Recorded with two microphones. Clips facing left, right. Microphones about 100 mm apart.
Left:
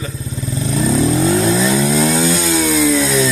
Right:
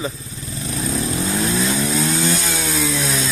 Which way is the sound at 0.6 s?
90° left.